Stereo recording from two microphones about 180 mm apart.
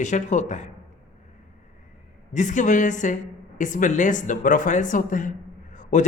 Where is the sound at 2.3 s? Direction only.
45° left (ahead or behind).